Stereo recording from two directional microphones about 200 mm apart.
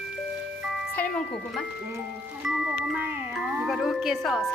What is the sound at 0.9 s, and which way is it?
Speech, 5° left (ahead or behind).